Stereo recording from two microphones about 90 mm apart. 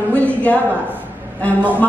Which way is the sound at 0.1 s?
15° left (ahead or behind).